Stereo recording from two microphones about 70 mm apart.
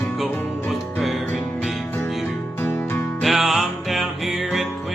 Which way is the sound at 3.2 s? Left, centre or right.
Centre.